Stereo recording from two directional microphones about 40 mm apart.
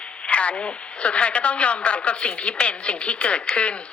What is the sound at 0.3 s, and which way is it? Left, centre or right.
Speech, left.